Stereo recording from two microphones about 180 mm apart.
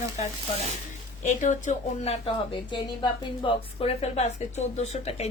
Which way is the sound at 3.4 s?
25° left (ahead or behind).